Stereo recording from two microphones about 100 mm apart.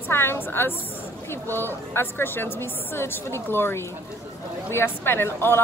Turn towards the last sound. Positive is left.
turn(degrees=25)  # may be behind; listen again after turning